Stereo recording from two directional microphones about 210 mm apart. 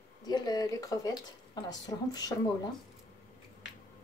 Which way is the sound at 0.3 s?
20° left (ahead or behind).